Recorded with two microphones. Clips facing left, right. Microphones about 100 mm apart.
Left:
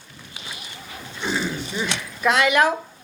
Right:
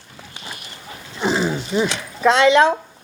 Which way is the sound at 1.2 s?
30° right (ahead or behind).